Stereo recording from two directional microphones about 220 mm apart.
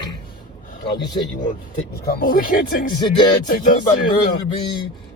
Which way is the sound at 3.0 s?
20° left (ahead or behind).